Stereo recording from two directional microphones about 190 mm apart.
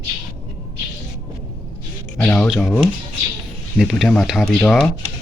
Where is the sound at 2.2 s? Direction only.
5° left (ahead or behind).